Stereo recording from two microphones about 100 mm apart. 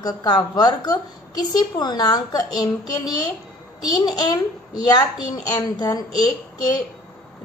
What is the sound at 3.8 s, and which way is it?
A woman's voice, 40° left (ahead or behind).